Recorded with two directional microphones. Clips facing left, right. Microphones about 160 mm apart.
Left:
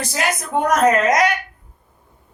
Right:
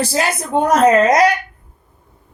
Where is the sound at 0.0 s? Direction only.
30° right (ahead or behind).